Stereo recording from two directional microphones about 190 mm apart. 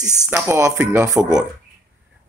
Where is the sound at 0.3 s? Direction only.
10° right (ahead or behind).